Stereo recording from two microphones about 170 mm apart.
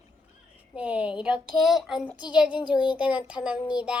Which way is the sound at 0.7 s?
10° right (ahead or behind).